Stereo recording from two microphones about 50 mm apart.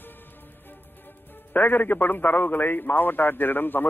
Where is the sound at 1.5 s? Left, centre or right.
Left.